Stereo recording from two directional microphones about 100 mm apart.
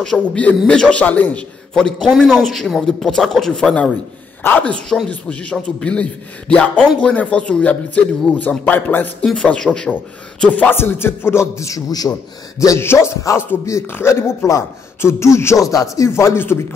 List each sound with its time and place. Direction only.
0.0 s a man's voice: 5° left (ahead or behind)
4.4 s a man's voice: 20° left (ahead or behind)
9.2 s a man's voice: 10° left (ahead or behind); by 16.5 s 25° left (ahead or behind)